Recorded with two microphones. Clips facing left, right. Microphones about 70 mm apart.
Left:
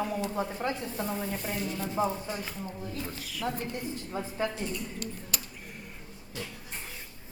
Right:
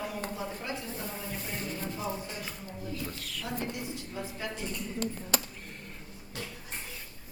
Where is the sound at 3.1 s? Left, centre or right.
Centre.